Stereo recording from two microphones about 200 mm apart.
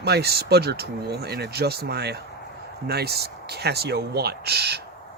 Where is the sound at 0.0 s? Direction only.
55° right (ahead or behind).